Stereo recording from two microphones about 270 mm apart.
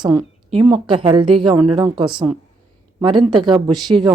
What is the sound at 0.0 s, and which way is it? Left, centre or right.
Speech, centre.